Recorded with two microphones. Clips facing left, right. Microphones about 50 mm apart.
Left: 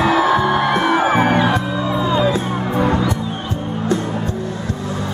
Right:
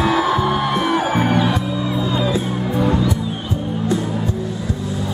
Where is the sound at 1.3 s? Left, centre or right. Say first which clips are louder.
Left 2 dB; left.